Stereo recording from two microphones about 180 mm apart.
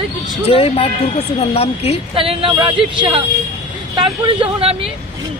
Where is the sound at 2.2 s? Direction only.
30° right (ahead or behind).